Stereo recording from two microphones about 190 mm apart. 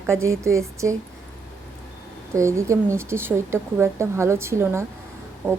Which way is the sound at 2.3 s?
15° right (ahead or behind).